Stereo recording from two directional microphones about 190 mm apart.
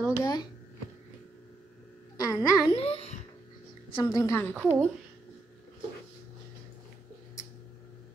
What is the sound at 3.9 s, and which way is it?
Speech, 20° left (ahead or behind).